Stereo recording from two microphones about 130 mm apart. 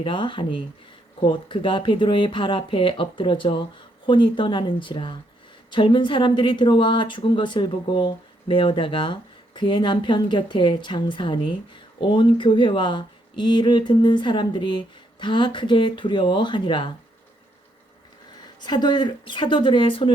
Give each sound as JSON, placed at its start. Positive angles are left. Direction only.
{"t": 0.0, "sound": "a woman's voice", "side_deg": 40}
{"t": 18.6, "sound": "a woman's voice", "side_deg": 35}